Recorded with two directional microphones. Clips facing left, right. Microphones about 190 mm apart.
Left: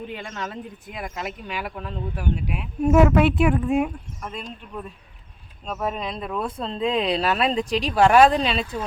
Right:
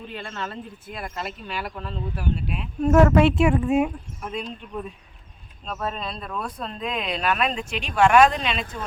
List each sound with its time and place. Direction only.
0.1 s speech: 15° left (ahead or behind); by 4.4 s centre (ahead or behind)
5.6 s speech: 15° left (ahead or behind); by 8.8 s 35° left (ahead or behind)